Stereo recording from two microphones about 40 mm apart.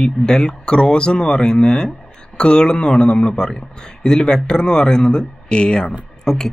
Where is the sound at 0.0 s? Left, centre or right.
Centre.